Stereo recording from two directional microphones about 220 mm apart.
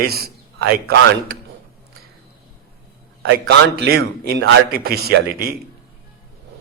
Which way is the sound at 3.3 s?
45° right (ahead or behind).